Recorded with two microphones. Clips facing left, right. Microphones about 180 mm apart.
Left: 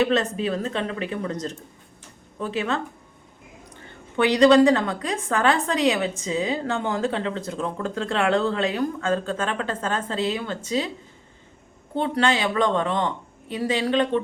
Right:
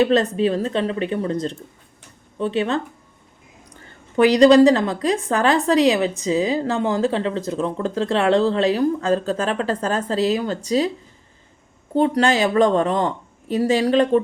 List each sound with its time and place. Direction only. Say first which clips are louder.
0.0 s a woman's voice: right 5 dB; 35° right (ahead or behind)
4.2 s a woman's voice: right 4 dB; 35° right (ahead or behind)
11.9 s a woman's voice: right 5 dB; 40° right (ahead or behind)